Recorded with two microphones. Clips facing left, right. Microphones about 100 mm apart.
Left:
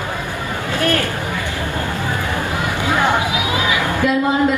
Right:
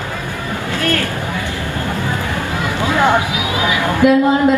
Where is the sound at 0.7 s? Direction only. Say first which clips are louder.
Left 1 dB; 20° left (ahead or behind).